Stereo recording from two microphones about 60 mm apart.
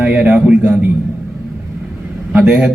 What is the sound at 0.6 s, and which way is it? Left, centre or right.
Speech, right.